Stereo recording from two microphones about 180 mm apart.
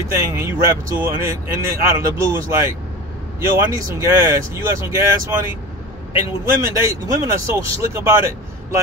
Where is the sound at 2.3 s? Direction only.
15° right (ahead or behind).